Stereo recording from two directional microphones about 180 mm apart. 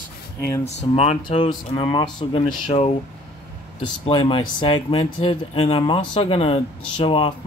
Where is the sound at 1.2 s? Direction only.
25° left (ahead or behind).